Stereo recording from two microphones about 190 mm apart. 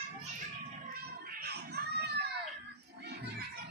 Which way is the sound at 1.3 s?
55° right (ahead or behind).